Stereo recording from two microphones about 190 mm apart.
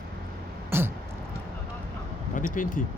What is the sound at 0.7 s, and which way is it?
Throat clearing, 10° right (ahead or behind).